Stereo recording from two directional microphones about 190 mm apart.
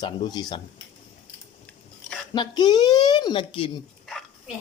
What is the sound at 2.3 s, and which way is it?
Speech, 20° left (ahead or behind).